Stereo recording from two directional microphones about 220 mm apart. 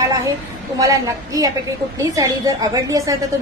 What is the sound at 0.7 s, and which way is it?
A woman's voice, 15° right (ahead or behind).